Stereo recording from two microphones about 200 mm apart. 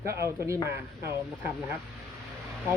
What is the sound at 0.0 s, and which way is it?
Speech, 15° right (ahead or behind).